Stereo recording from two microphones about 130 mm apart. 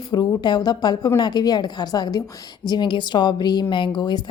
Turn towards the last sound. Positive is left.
turn(degrees=35)  # may be behind; listen again after turning